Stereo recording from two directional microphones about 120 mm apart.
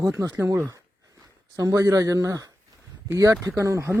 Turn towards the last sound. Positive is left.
turn(degrees=-25)  # may be behind; listen again after turning